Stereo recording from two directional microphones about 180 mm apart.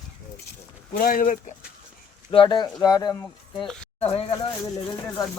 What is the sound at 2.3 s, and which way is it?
Speech, 25° left (ahead or behind).